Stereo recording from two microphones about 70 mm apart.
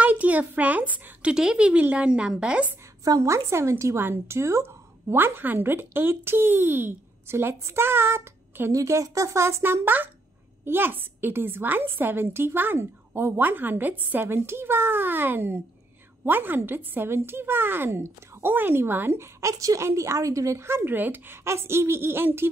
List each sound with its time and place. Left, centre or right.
0.0 s a woman's voice: right
1.3 s a woman's voice: centre
3.2 s speech: right
8.7 s a woman's voice: right
19.4 s a woman's voice: right